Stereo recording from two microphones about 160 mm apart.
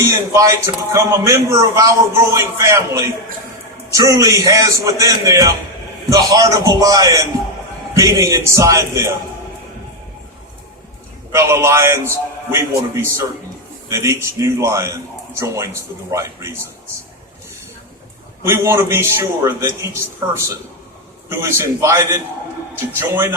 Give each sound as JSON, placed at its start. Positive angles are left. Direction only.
{"t": 0.0, "sound": "a man's voice", "side_deg": -20}
{"t": 11.3, "sound": "a man's voice", "side_deg": -15}
{"t": 18.4, "sound": "a man's voice", "side_deg": -15}